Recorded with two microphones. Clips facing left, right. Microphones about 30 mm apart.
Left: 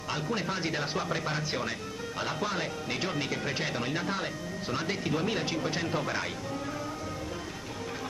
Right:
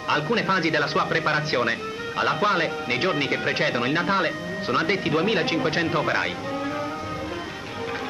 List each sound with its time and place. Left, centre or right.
0.1 s speech: right